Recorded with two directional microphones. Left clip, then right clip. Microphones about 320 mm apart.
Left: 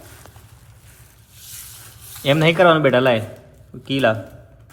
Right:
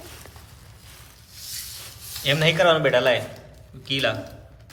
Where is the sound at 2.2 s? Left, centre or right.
Centre.